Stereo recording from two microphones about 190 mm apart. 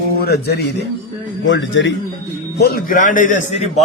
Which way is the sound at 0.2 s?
55° left (ahead or behind).